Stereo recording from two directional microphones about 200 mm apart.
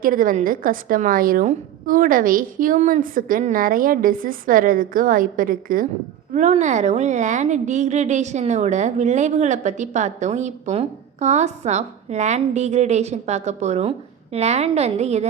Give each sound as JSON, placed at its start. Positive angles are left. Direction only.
{"t": 0.0, "sound": "a woman's voice", "side_deg": -45}